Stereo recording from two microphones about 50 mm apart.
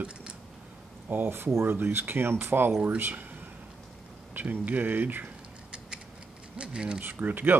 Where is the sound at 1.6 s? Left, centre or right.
Right.